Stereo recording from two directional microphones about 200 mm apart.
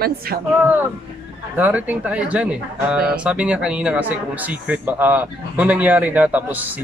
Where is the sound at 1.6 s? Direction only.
10° right (ahead or behind).